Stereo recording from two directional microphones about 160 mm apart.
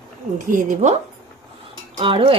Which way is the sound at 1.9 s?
30° right (ahead or behind).